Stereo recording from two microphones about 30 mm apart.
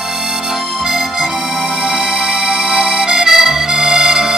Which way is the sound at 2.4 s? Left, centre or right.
Right.